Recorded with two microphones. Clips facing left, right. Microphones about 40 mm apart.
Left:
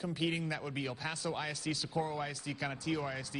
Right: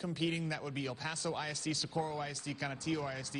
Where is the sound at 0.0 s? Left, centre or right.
Centre.